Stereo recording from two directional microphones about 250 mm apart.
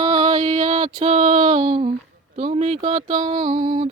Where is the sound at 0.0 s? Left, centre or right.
Right.